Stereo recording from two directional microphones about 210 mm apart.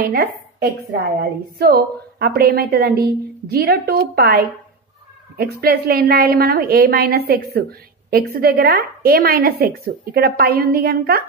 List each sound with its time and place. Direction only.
0.0 s a woman's voice: 45° right (ahead or behind)